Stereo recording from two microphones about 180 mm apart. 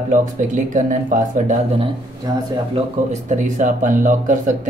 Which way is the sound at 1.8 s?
30° right (ahead or behind).